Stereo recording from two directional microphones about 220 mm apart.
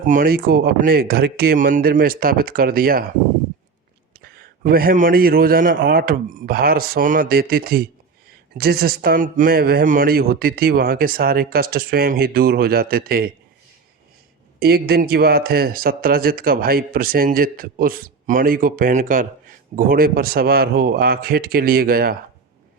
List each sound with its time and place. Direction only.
0.1 s speech: 40° right (ahead or behind)
4.2 s speech: 40° right (ahead or behind)
14.6 s speech: 45° right (ahead or behind)